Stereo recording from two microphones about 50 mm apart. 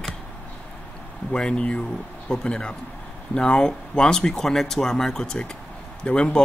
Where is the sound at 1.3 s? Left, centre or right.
Centre.